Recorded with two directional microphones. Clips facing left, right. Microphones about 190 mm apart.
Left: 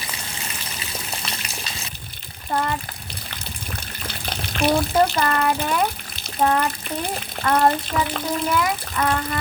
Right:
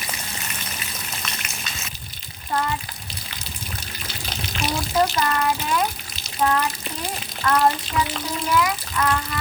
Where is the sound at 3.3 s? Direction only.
55° left (ahead or behind).